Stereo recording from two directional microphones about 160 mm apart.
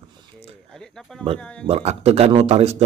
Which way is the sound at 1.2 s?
35° right (ahead or behind).